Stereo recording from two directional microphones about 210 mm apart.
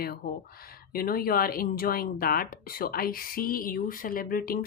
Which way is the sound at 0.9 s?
45° left (ahead or behind).